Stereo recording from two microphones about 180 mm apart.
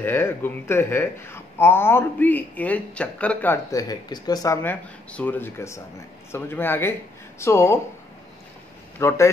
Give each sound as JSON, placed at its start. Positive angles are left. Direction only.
{"t": 0.0, "sound": "speech", "side_deg": 10}
{"t": 3.7, "sound": "speech", "side_deg": 20}
{"t": 9.0, "sound": "speech", "side_deg": 15}